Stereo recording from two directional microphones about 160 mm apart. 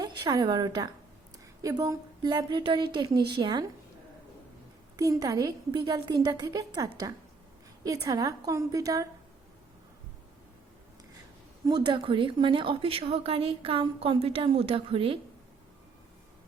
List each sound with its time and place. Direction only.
0.0 s a woman's voice: 25° right (ahead or behind)
4.9 s a woman's voice: 20° right (ahead or behind)
11.6 s a woman's voice: 25° right (ahead or behind)